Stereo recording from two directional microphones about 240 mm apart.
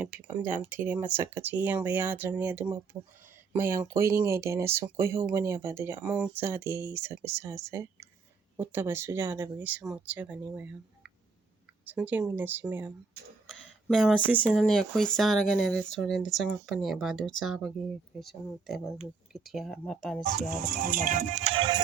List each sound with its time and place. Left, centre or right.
0.0 s speech: centre
20.3 s music: right